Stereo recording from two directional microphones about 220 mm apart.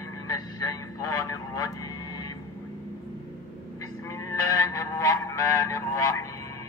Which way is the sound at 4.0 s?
15° left (ahead or behind).